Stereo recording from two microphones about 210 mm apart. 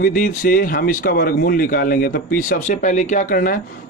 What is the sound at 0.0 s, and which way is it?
Speech, 40° left (ahead or behind).